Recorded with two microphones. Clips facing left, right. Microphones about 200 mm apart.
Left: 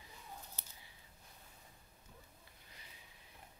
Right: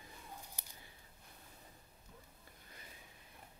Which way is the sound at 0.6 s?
15° right (ahead or behind).